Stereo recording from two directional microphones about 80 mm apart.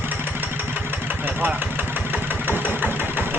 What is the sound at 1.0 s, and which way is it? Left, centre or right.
Vehicle, right.